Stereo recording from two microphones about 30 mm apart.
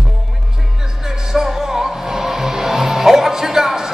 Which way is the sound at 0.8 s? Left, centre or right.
Centre.